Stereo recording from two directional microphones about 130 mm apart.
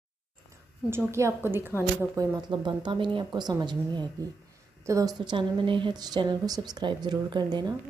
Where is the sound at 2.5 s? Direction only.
35° right (ahead or behind).